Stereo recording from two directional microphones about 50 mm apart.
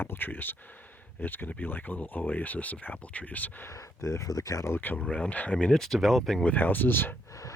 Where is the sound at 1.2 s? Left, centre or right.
Left.